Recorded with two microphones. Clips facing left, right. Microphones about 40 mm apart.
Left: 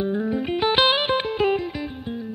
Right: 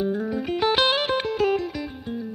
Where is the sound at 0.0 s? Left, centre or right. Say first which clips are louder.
Left 1 dB; left.